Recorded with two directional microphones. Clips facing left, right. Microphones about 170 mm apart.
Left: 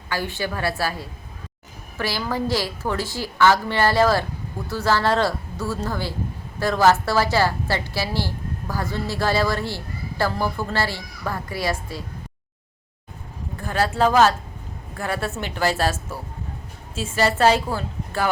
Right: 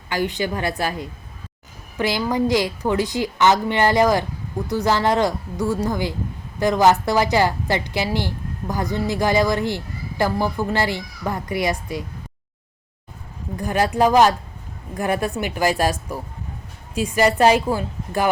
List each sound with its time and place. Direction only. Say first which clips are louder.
0.1 s a woman's voice: right 4 dB; 15° right (ahead or behind)
13.6 s a woman's voice: right 2 dB; 15° right (ahead or behind)